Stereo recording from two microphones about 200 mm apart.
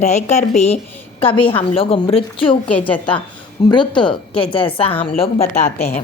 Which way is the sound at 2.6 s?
5° left (ahead or behind).